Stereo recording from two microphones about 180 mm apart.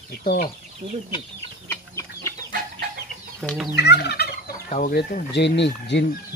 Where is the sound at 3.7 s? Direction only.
65° left (ahead or behind).